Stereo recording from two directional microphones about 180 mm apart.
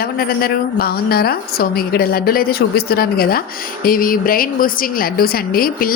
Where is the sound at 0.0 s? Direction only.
55° left (ahead or behind).